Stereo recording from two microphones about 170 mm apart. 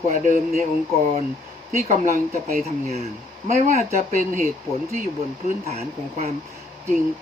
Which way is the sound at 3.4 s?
40° right (ahead or behind).